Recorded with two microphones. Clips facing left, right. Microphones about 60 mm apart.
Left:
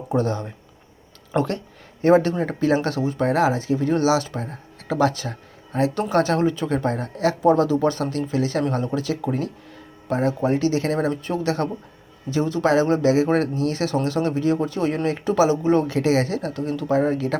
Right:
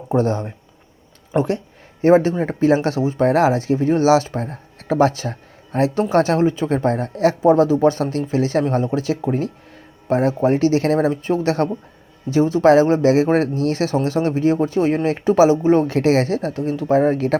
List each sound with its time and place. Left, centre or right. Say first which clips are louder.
0.1 s speech: right 4 dB; right
1.3 s speech: right 3 dB; centre
2.4 s speech: right 4 dB; right
5.9 s speech: right 4 dB; right
13.9 s speech: right 3 dB; right